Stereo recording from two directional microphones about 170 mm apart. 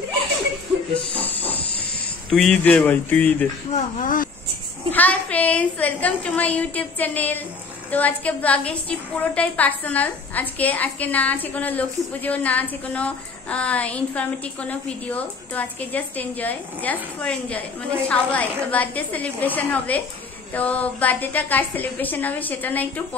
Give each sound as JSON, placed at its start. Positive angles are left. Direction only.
{"t": 1.1, "sound": "speech", "side_deg": 10}
{"t": 1.4, "sound": "hiss", "side_deg": 35}
{"t": 2.3, "sound": "a woman's voice", "side_deg": 5}
{"t": 3.7, "sound": "speech", "side_deg": 50}
{"t": 4.9, "sound": "a woman's voice", "side_deg": 10}